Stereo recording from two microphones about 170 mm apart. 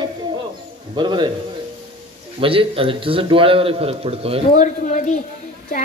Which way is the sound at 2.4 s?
35° right (ahead or behind).